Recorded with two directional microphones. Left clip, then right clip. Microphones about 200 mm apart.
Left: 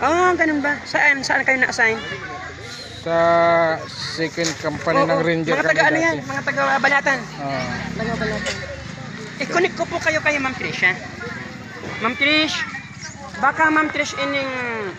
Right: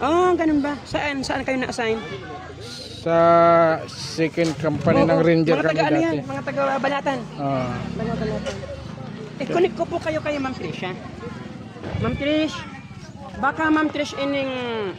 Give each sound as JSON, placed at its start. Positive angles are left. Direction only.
{"t": 0.0, "sound": "speech", "side_deg": -65}
{"t": 3.1, "sound": "speech", "side_deg": -50}
{"t": 3.5, "sound": "speech", "side_deg": -35}
{"t": 4.2, "sound": "speech", "side_deg": -60}
{"t": 9.4, "sound": "speech", "side_deg": -55}
{"t": 12.0, "sound": "speech", "side_deg": -15}
{"t": 13.4, "sound": "speech", "side_deg": -60}
{"t": 14.5, "sound": "speech", "side_deg": -50}